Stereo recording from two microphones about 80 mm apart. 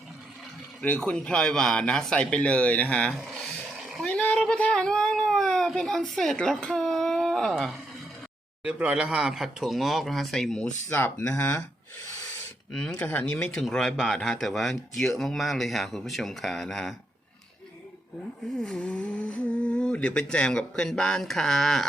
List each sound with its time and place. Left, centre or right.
0.8 s speech: centre
3.4 s a sound: centre
4.0 s a sound: centre
6.3 s speech: centre
8.6 s speech: centre
10.8 s speech: left
12.7 s speech: centre
13.0 s speech: left
13.6 s speech: centre
18.6 s speech: centre